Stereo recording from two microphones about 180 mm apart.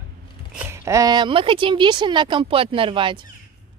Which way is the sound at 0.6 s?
15° right (ahead or behind).